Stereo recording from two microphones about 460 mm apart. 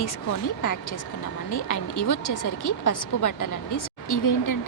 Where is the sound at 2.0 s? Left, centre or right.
Left.